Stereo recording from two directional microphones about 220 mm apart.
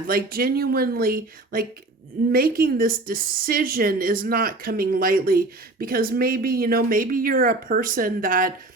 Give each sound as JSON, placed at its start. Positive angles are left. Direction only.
{"t": 0.1, "sound": "a woman's voice", "side_deg": -40}